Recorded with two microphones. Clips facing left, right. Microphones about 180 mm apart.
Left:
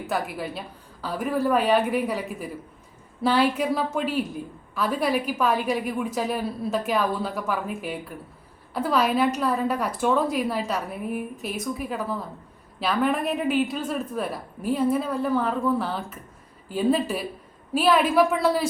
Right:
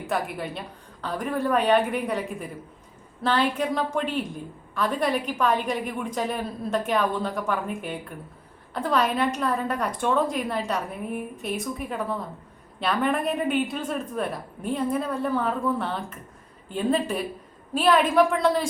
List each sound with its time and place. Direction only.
0.1 s a woman's voice: centre (ahead or behind)